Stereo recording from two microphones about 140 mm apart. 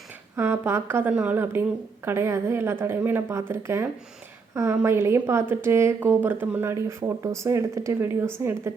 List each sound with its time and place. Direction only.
0.3 s a woman's voice: 15° right (ahead or behind)